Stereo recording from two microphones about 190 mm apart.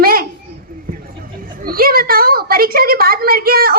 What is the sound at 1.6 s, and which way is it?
A woman's voice, 50° right (ahead or behind).